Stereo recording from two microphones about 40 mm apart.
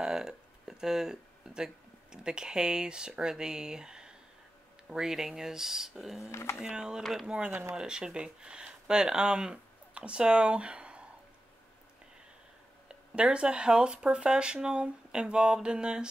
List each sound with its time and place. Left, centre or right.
0.0 s speech: centre
6.6 s speech: centre
12.8 s speech: right